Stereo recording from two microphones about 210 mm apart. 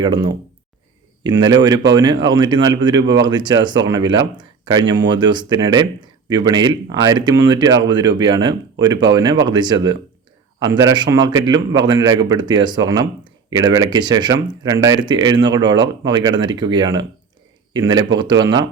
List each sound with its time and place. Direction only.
0.0 s speech: 25° right (ahead or behind)